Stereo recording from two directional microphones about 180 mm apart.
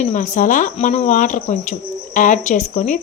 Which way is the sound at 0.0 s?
45° left (ahead or behind).